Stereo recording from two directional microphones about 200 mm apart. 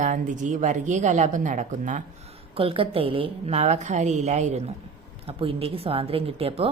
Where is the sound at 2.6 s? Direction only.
25° right (ahead or behind).